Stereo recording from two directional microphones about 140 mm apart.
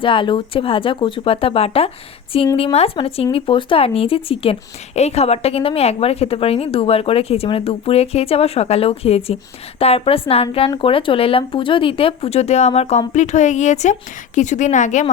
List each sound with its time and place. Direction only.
0.0 s a woman's voice: 35° left (ahead or behind); by 15.0 s 60° left (ahead or behind)